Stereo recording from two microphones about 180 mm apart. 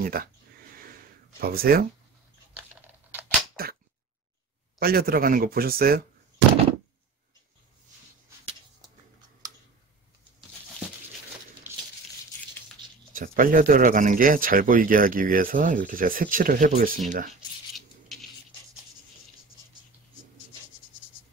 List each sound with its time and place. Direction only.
0.0 s speech: 55° right (ahead or behind)
1.4 s speech: 55° right (ahead or behind)
3.6 s a sound: 60° right (ahead or behind)
4.7 s speech: 55° right (ahead or behind)
13.1 s speech: 50° right (ahead or behind)
17.7 s a sound: centre (ahead or behind)